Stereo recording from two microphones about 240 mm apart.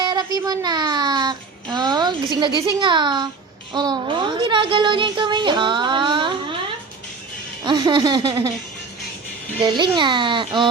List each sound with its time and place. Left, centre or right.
0.0 s a child's voice: centre
7.6 s a sound: centre
9.6 s speech: centre